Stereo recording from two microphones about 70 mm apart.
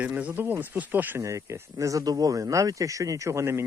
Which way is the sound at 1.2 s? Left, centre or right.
Right.